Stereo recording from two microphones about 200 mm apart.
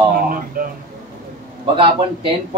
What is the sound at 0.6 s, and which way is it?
Speech, 45° right (ahead or behind).